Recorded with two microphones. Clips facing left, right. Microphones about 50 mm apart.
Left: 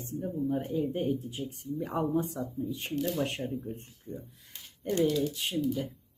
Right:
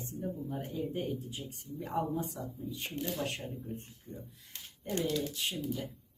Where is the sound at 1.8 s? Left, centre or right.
Left.